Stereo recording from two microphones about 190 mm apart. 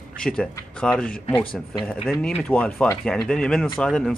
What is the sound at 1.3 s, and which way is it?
Speech, 20° left (ahead or behind).